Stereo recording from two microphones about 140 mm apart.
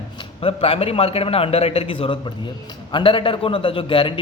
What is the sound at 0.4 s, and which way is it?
A man's voice, 45° left (ahead or behind).